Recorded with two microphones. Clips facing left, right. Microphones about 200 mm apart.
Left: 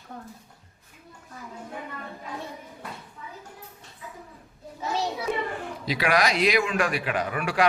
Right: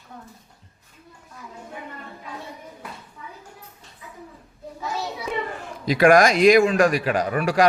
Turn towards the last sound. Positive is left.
turn(degrees=-40)  # may be behind; listen again after turning